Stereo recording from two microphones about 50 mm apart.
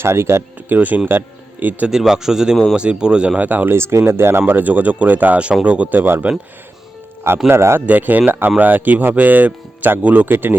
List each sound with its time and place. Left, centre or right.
0.0 s speech: right
0.7 s speech: right
1.9 s speech: centre; by 3.7 s right
3.7 s speech: right
4.5 s speech: right
5.6 s speech: right
7.4 s speech: right
7.9 s speech: right